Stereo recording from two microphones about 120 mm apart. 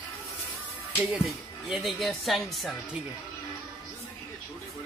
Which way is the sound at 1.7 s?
Centre (ahead or behind).